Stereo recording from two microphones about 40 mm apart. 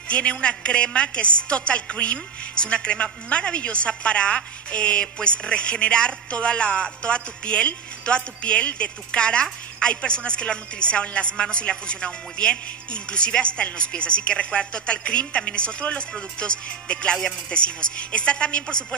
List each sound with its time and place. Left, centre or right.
0.1 s speech: left